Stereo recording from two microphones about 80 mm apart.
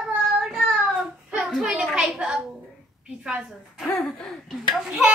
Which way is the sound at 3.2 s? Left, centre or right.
Centre.